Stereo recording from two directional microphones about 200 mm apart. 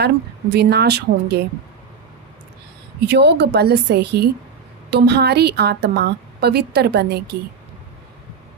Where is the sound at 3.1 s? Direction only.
55° right (ahead or behind).